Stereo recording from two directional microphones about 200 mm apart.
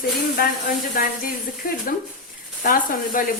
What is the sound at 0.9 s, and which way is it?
Speech, 50° left (ahead or behind).